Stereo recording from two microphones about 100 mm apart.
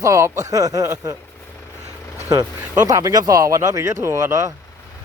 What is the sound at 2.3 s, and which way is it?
Speech, 35° right (ahead or behind).